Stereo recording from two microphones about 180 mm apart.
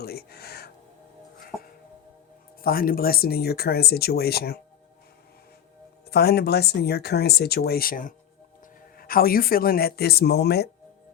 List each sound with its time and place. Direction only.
0.0 s music: 60° left (ahead or behind)
1.5 s music: 5° left (ahead or behind)
2.6 s speech: 55° left (ahead or behind)
6.1 s speech: 60° left (ahead or behind)